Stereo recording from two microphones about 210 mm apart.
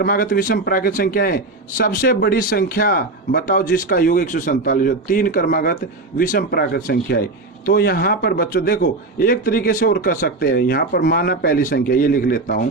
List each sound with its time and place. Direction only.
0.0 s speech: 45° left (ahead or behind)